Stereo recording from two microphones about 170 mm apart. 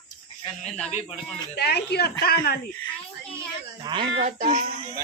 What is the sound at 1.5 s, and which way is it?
Speech, 70° left (ahead or behind).